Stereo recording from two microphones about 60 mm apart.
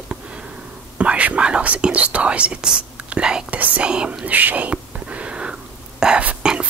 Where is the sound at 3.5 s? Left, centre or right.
Right.